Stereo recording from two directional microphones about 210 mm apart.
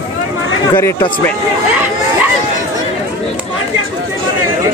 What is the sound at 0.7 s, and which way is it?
Speech, 20° left (ahead or behind).